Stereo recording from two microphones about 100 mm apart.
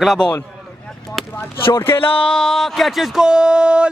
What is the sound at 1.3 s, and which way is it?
Speech, 20° left (ahead or behind).